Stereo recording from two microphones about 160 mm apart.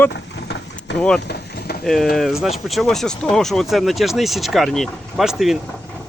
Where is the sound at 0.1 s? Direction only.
90° left.